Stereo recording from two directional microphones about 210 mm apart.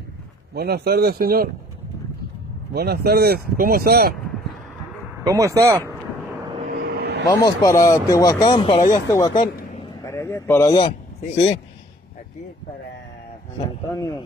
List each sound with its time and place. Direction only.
0.6 s speech: 50° right (ahead or behind)
2.7 s speech: 50° right (ahead or behind)
5.2 s speech: 15° right (ahead or behind)
6.7 s vehicle: 50° right (ahead or behind)
7.2 s speech: 15° left (ahead or behind)
10.0 s a sound: 15° left (ahead or behind)
10.7 s speech: 25° left (ahead or behind)